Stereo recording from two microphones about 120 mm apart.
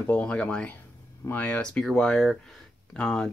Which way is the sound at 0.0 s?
10° left (ahead or behind).